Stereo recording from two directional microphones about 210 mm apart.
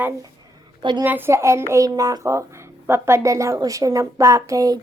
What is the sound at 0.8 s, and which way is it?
Speech, 20° right (ahead or behind).